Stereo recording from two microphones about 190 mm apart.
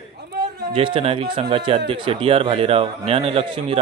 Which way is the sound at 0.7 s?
30° right (ahead or behind).